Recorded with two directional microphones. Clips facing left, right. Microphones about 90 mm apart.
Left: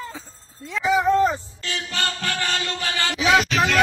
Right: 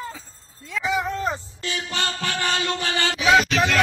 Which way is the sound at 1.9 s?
20° right (ahead or behind).